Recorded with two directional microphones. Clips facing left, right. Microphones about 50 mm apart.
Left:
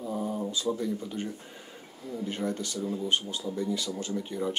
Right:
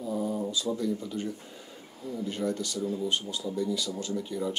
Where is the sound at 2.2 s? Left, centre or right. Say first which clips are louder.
Right 1 dB; left.